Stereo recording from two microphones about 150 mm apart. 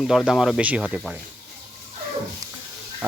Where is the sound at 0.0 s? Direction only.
Centre (ahead or behind).